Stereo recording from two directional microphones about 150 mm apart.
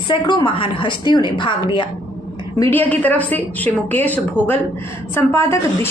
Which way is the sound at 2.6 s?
15° left (ahead or behind).